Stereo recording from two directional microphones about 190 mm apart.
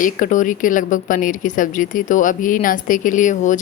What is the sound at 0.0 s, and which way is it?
Speech, 45° left (ahead or behind).